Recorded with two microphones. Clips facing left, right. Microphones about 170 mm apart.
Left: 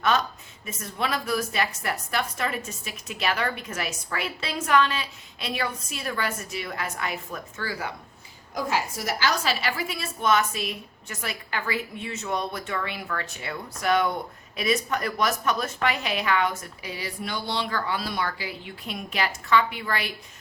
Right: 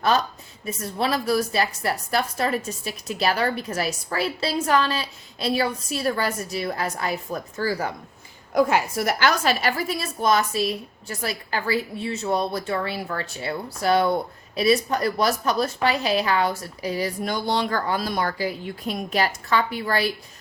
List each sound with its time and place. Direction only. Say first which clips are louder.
0.0 s a woman's voice: right 3 dB; 35° right (ahead or behind)
8.5 s a woman's voice: right 8 dB; 60° right (ahead or behind); by 20.1 s 35° right (ahead or behind)